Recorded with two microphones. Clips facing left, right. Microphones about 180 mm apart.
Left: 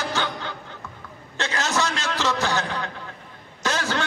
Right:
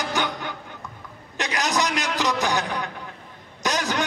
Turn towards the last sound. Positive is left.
turn(degrees=-15)  # may be behind; listen again after turning